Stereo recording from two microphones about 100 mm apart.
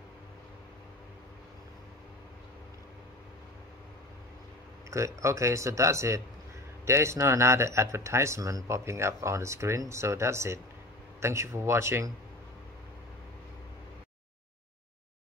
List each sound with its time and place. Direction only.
4.9 s speech: 30° right (ahead or behind)